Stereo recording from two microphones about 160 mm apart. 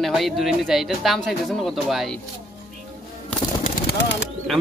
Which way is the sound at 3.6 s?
70° left (ahead or behind).